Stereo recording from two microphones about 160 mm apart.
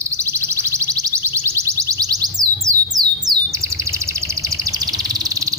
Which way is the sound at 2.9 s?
25° right (ahead or behind).